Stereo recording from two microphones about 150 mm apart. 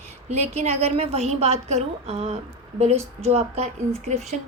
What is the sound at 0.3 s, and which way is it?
Speech, 45° right (ahead or behind).